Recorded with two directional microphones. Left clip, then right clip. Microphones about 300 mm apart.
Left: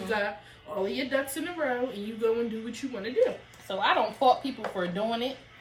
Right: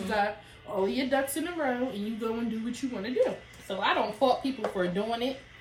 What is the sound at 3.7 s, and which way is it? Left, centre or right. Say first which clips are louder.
A woman's voice: left 2 dB; centre.